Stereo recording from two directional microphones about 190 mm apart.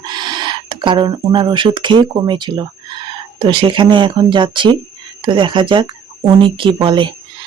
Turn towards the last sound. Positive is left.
turn(degrees=-25)  # may be behind; listen again after turning